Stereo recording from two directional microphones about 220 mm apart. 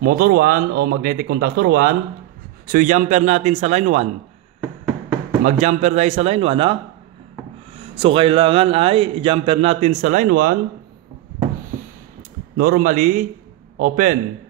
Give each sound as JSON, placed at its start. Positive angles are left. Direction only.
{"t": 0.0, "sound": "a man's voice", "side_deg": -40}
{"t": 5.4, "sound": "a man's voice", "side_deg": -30}
{"t": 8.0, "sound": "a man's voice", "side_deg": -25}
{"t": 12.5, "sound": "a man's voice", "side_deg": -40}